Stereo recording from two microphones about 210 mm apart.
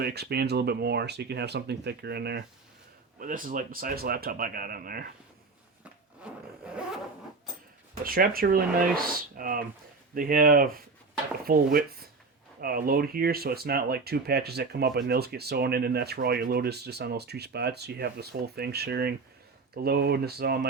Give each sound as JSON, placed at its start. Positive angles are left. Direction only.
{"t": 0.0, "sound": "speech", "side_deg": -50}
{"t": 3.2, "sound": "speech", "side_deg": -40}
{"t": 6.3, "sound": "vehicle", "side_deg": -5}
{"t": 8.0, "sound": "speech", "side_deg": -45}